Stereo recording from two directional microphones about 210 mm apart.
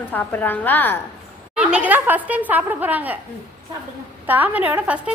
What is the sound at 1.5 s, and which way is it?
A woman's voice, 5° right (ahead or behind).